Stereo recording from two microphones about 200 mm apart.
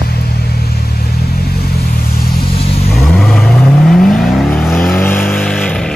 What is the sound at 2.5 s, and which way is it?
Vehicle, 30° left (ahead or behind).